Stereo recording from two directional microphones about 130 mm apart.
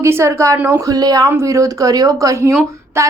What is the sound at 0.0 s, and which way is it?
A woman's voice, 20° right (ahead or behind).